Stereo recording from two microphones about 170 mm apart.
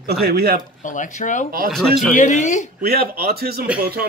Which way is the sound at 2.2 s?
45° left (ahead or behind).